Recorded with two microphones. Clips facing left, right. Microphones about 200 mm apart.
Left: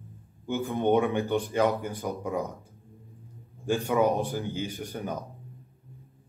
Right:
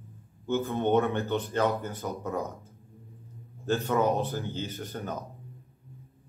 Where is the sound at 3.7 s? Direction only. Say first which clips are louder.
Left 1 dB; 10° left (ahead or behind).